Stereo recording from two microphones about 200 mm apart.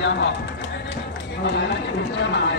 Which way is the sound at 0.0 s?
60° left (ahead or behind).